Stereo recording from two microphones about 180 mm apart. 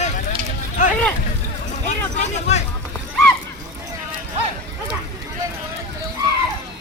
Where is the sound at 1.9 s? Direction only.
40° left (ahead or behind).